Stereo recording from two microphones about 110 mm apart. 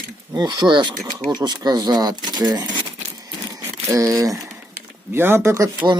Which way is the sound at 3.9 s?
30° right (ahead or behind).